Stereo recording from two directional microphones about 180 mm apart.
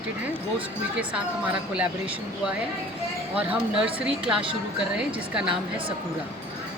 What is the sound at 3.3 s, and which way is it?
Speech, 5° right (ahead or behind).